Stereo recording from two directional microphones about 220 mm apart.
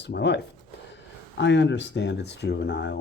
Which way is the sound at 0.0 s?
50° left (ahead or behind).